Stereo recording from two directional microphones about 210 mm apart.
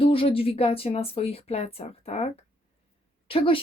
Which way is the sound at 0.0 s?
25° left (ahead or behind).